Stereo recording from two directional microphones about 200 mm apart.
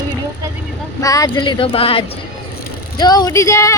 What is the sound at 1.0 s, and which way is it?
A woman's voice, 20° left (ahead or behind).